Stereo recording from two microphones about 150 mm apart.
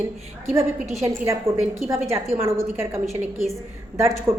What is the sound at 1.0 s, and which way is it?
A woman's voice, 20° right (ahead or behind).